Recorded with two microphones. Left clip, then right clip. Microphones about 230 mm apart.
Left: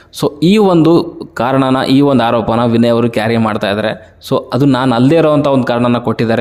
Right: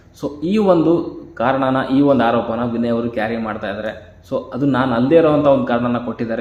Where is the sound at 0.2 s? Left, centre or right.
Left.